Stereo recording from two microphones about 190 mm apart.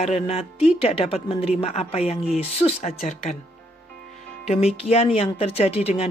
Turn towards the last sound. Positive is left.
turn(degrees=35)  # may be behind; listen again after turning